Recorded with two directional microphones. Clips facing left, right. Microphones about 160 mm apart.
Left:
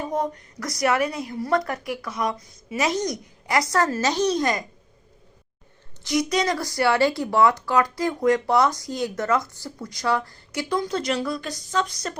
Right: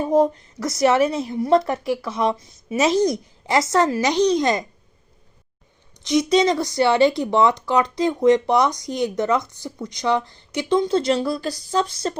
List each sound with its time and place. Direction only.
0.0 s speech: 30° right (ahead or behind)
6.0 s speech: 20° right (ahead or behind)